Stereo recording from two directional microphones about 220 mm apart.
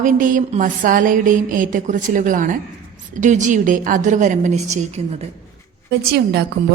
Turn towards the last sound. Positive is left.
turn(degrees=-45)  # may be behind; listen again after turning